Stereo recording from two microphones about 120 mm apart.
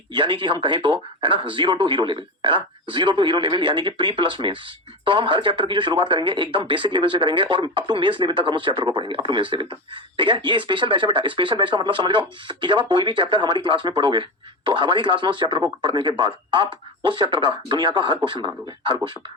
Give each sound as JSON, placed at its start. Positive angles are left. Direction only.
{"t": 0.1, "sound": "speech", "side_deg": -40}